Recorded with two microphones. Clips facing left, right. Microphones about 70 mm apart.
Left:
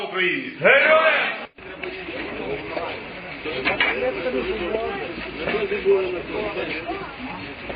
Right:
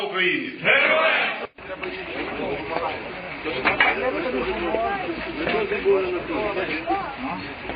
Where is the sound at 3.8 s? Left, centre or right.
Right.